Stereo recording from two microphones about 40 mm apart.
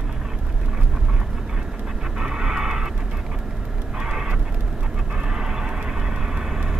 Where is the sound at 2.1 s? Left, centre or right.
Centre.